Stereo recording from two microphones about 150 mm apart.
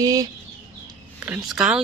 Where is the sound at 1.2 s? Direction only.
10° right (ahead or behind).